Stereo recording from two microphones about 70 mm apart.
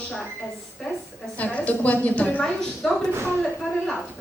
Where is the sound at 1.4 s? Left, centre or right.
Centre.